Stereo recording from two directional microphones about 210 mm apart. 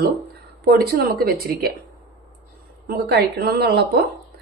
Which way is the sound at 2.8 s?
50° right (ahead or behind).